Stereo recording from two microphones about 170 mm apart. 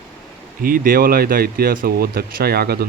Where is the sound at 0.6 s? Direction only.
55° right (ahead or behind).